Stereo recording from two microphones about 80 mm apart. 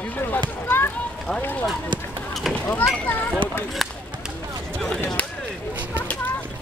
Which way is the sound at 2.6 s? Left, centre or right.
Left.